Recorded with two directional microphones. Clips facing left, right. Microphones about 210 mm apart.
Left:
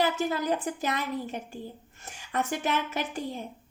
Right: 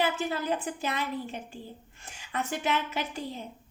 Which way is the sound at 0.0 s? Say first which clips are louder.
Left 2 dB; 40° left (ahead or behind).